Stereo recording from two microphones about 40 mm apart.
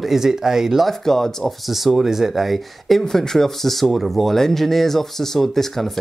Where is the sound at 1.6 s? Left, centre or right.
Centre.